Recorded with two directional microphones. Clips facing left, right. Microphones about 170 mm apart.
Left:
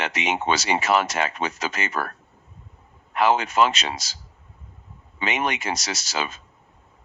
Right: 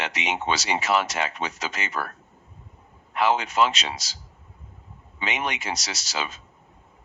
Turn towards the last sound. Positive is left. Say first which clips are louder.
# left 3 dB
turn(degrees=50)  # may be behind; listen again after turning